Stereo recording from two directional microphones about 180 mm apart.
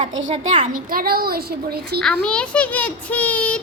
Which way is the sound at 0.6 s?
50° right (ahead or behind).